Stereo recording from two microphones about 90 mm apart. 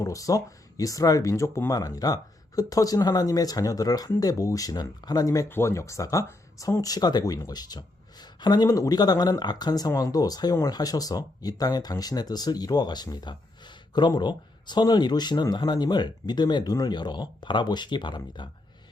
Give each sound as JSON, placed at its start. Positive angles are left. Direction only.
{"t": 0.0, "sound": "speech", "side_deg": 40}
{"t": 5.5, "sound": "speech", "side_deg": 30}